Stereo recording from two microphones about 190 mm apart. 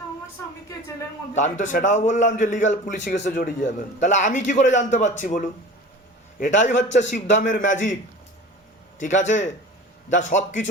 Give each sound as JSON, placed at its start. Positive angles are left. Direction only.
{"t": 1.4, "sound": "a man's voice", "side_deg": 40}
{"t": 9.0, "sound": "a man's voice", "side_deg": 40}